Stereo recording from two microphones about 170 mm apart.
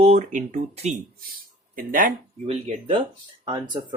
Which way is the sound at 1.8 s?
55° right (ahead or behind).